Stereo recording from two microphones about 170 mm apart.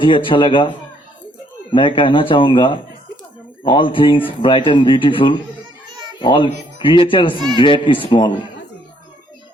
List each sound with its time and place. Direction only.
0.0 s speech: 30° left (ahead or behind)
1.7 s speech: 30° left (ahead or behind)